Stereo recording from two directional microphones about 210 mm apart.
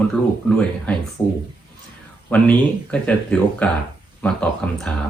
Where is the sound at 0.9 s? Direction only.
10° left (ahead or behind).